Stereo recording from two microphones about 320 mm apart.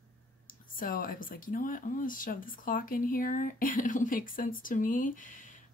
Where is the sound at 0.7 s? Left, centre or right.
Left.